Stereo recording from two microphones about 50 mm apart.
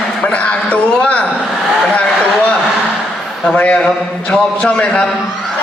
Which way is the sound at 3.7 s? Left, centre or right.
Centre.